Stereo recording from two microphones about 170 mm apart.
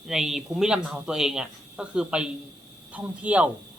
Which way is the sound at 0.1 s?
Centre (ahead or behind).